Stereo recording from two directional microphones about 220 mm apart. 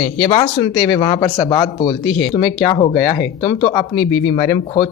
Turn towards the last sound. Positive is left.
turn(degrees=20)  # may be behind; listen again after turning